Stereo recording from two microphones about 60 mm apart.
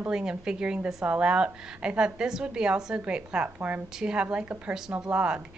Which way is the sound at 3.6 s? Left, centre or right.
Right.